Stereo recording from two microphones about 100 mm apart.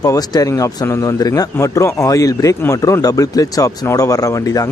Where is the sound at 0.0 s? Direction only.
35° left (ahead or behind).